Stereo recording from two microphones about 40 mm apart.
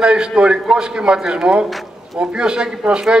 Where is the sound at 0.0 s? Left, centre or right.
Right.